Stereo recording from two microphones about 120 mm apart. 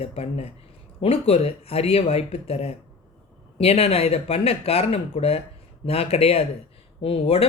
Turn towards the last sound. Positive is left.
turn(degrees=55)  # may be behind; listen again after turning